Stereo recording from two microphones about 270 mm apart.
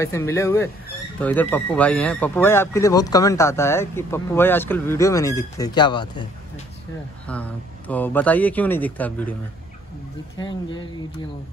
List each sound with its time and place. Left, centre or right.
0.0 s speech: centre
7.2 s speech: centre
10.3 s speech: centre